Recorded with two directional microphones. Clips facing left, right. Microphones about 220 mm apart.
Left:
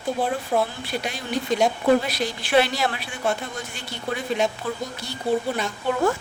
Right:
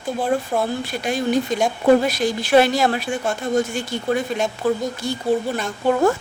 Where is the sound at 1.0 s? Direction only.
45° right (ahead or behind).